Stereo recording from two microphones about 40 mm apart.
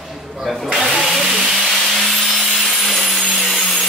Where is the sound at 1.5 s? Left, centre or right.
Centre.